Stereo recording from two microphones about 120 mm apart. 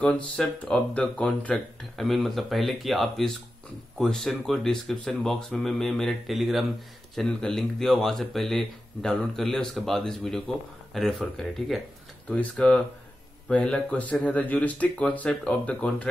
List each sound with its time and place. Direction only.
0.0 s speech: 10° left (ahead or behind)